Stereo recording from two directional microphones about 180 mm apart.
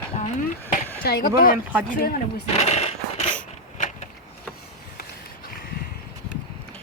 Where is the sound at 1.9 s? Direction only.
50° left (ahead or behind).